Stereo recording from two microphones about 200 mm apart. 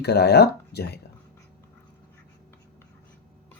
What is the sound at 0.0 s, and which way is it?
Speech, 55° left (ahead or behind).